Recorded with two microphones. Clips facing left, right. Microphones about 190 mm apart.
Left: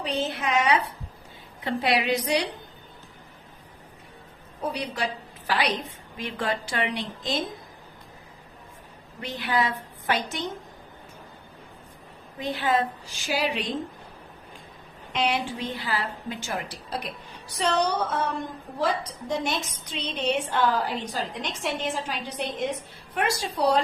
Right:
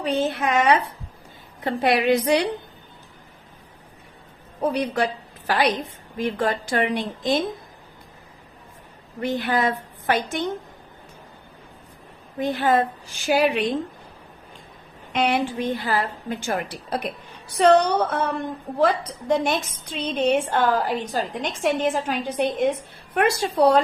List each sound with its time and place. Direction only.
0.0 s a woman's voice: 50° right (ahead or behind)
4.7 s a woman's voice: 55° right (ahead or behind)
6.1 s a woman's voice: 45° right (ahead or behind)
9.2 s a woman's voice: 50° right (ahead or behind)
12.4 s a woman's voice: 50° right (ahead or behind)
15.1 s a woman's voice: 55° right (ahead or behind)